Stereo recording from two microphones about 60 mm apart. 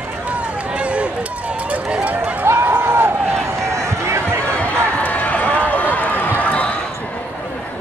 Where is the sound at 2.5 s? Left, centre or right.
Right.